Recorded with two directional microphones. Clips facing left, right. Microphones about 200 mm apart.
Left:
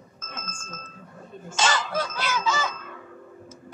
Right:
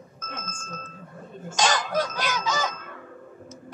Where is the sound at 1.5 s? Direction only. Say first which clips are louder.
Right 2 dB; 15° right (ahead or behind).